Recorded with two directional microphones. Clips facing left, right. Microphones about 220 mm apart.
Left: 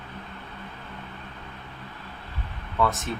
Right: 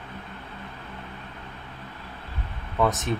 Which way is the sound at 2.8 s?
15° right (ahead or behind).